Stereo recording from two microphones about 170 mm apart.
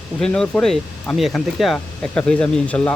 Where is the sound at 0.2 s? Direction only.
5° left (ahead or behind).